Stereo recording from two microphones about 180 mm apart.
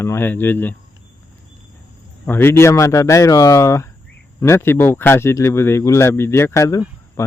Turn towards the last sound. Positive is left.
turn(degrees=15)  # may be behind; listen again after turning